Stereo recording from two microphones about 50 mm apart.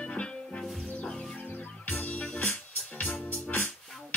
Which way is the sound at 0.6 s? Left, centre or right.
Centre.